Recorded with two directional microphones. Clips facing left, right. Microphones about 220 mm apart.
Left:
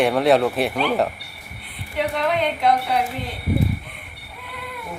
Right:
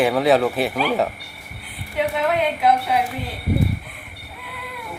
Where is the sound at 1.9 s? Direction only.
5° right (ahead or behind).